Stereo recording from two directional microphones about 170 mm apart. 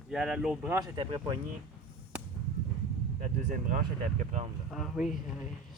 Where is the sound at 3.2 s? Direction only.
50° right (ahead or behind).